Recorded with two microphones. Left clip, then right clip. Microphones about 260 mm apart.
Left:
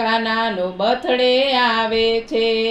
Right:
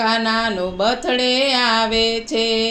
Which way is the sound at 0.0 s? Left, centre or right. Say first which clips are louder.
Even; right.